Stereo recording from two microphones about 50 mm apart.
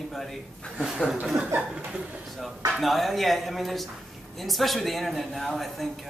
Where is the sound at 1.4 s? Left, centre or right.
Right.